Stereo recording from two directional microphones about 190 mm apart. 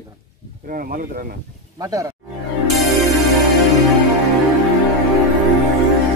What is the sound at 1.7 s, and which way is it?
Speech, 15° right (ahead or behind).